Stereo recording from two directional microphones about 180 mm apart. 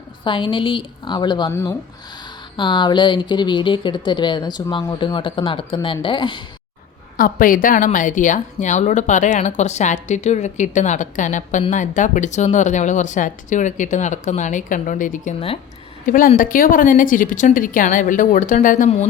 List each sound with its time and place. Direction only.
0.3 s speech: 30° left (ahead or behind)
7.2 s a woman's voice: 50° left (ahead or behind)
16.0 s a woman's voice: 50° left (ahead or behind)